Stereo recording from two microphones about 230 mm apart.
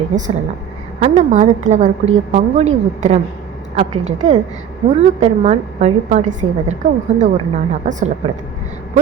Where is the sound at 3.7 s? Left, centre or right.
Right.